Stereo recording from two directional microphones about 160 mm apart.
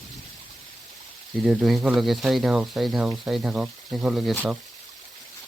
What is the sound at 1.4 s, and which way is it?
Speech, centre (ahead or behind).